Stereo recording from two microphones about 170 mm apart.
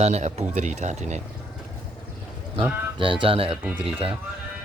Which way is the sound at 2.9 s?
30° right (ahead or behind).